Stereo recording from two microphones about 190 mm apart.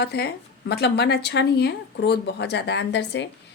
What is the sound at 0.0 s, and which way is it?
Speech, 60° left (ahead or behind).